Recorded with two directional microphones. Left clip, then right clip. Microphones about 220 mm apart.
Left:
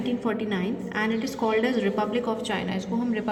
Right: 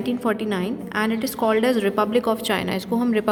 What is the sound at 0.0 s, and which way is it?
Speech, 45° right (ahead or behind).